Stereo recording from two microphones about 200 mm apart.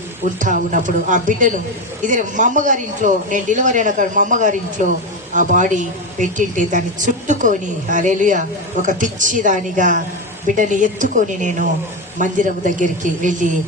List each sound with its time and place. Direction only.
0.3 s a woman's voice: 40° right (ahead or behind)